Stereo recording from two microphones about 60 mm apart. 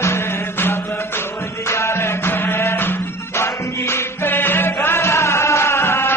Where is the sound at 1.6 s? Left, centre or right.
Left.